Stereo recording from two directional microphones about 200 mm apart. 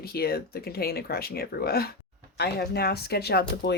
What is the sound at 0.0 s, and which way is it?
Speech, 50° left (ahead or behind).